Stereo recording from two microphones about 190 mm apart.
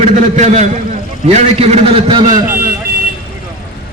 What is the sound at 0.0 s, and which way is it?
A man's voice, 35° right (ahead or behind).